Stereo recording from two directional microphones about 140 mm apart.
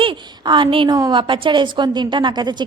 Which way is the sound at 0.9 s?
30° right (ahead or behind).